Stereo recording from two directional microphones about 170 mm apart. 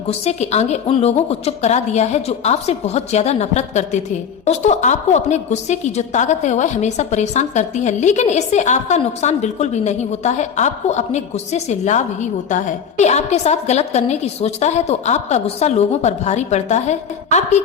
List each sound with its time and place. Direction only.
0.1 s a woman's voice: 40° left (ahead or behind)